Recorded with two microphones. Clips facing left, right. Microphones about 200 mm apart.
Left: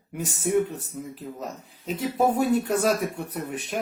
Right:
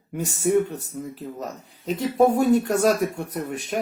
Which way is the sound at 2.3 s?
40° right (ahead or behind).